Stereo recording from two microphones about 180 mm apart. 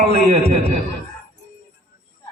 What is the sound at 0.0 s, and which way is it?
Speech, 35° right (ahead or behind).